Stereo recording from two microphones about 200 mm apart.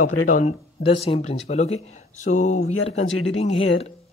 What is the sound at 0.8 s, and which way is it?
Speech, 30° left (ahead or behind).